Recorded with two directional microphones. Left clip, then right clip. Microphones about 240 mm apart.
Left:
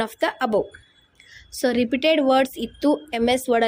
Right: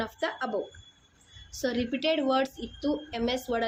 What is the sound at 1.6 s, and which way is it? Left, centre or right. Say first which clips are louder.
Speech: left 9 dB; left.